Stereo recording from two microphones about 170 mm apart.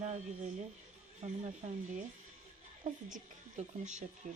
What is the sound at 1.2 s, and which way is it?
A woman's voice, 40° right (ahead or behind).